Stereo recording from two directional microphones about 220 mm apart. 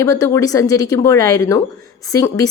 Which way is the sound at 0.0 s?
15° left (ahead or behind).